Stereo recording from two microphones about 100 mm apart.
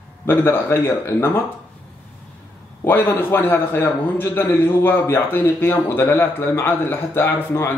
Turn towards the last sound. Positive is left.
turn(degrees=25)  # may be behind; listen again after turning